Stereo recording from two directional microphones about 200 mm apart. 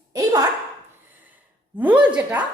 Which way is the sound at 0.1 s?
20° right (ahead or behind).